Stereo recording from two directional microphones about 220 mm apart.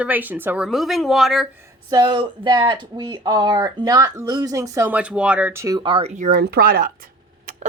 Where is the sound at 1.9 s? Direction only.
20° right (ahead or behind).